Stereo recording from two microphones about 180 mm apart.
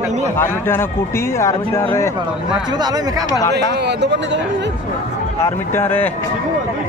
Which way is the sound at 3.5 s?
65° right (ahead or behind).